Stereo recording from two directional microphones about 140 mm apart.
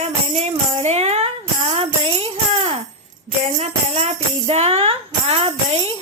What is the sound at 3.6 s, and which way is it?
Music, 45° right (ahead or behind).